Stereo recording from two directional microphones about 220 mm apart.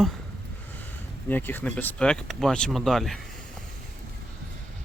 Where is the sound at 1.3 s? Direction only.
10° left (ahead or behind).